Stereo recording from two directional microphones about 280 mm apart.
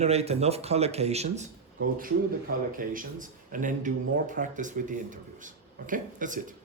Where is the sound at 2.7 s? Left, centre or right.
Right.